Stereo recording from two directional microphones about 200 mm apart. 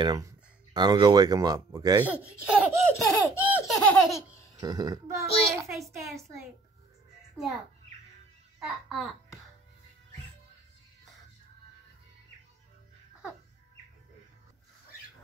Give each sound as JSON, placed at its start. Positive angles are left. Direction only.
{"t": 0.0, "sound": "a child's voice", "side_deg": -20}
{"t": 3.3, "sound": "laughter", "side_deg": -5}
{"t": 4.6, "sound": "a child's voice", "side_deg": -20}
{"t": 8.5, "sound": "a child's voice", "side_deg": 0}